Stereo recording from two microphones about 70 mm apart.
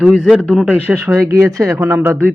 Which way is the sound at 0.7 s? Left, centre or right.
Right.